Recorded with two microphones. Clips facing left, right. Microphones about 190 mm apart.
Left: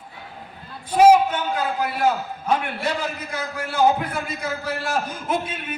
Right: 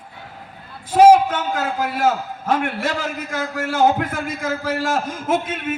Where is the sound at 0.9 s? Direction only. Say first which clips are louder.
Right 3 dB; 90° right.